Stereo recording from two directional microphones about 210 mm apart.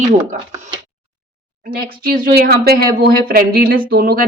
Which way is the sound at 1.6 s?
45° right (ahead or behind).